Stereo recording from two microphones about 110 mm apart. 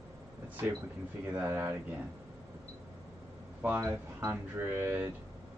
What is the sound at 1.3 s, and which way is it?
Speech, 20° right (ahead or behind).